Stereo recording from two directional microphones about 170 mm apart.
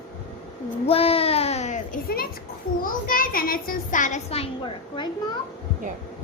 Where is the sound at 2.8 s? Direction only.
55° left (ahead or behind); by 5.0 s 35° left (ahead or behind).